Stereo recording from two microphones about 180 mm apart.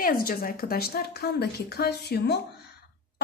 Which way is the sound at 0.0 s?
55° left (ahead or behind).